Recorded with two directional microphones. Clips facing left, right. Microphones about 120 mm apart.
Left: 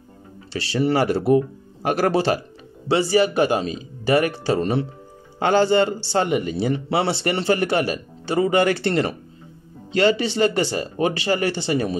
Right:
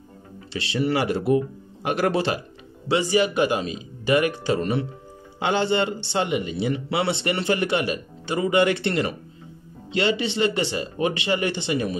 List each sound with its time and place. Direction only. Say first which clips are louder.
0.5 s speech: left 3 dB; 40° left (ahead or behind)